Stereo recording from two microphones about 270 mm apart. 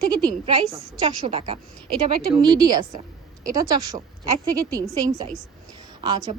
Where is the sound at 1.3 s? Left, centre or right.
Right.